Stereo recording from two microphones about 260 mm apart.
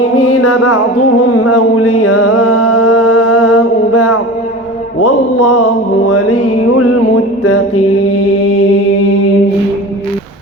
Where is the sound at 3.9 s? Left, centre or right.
Left.